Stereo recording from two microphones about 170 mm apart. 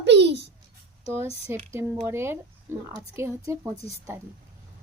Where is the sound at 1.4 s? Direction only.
15° right (ahead or behind).